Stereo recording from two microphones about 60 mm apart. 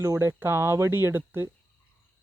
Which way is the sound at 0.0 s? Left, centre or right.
Right.